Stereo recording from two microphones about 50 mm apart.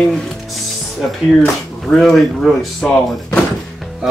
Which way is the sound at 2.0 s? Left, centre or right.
Centre.